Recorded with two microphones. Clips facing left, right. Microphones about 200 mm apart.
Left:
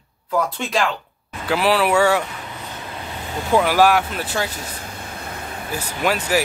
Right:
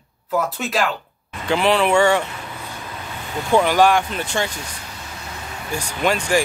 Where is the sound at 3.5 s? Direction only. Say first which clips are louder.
Even; 5° left (ahead or behind).